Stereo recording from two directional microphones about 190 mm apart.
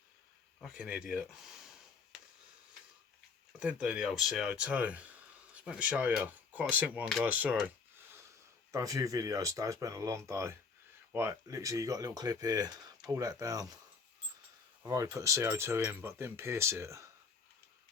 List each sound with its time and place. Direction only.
0.6 s speech: 5° right (ahead or behind)
3.6 s speech: 5° right (ahead or behind)
8.7 s speech: 15° right (ahead or behind)
14.8 s speech: 15° right (ahead or behind)